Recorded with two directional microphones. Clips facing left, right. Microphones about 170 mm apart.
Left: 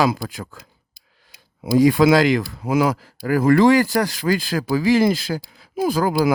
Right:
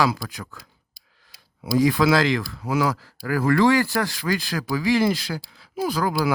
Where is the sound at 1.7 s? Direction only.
25° left (ahead or behind).